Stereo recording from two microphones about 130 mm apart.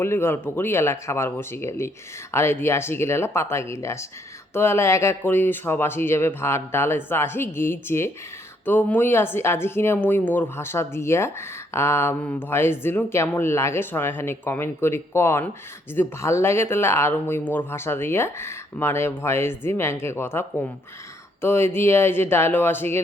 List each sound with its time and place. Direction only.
0.0 s speech: 20° left (ahead or behind)
21.4 s speech: 20° left (ahead or behind)